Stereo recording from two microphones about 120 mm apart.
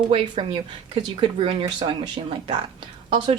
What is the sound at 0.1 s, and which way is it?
Speech, 45° right (ahead or behind).